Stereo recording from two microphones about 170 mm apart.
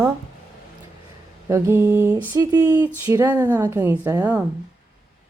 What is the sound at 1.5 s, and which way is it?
A woman's voice, 15° right (ahead or behind).